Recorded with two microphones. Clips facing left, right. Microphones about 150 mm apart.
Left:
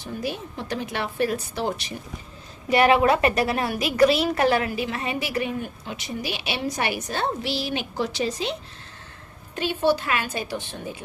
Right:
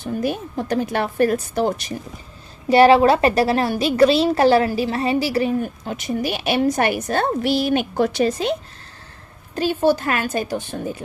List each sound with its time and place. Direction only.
0.0 s a woman's voice: 50° right (ahead or behind)
2.6 s a woman's voice: 30° right (ahead or behind); by 8.5 s 50° right (ahead or behind)
9.6 s a woman's voice: 40° right (ahead or behind)